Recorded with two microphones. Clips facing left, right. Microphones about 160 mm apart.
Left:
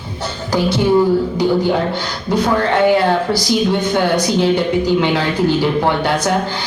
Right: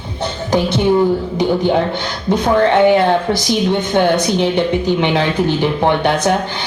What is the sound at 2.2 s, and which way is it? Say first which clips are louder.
A man's voice: right 3 dB; 20° right (ahead or behind).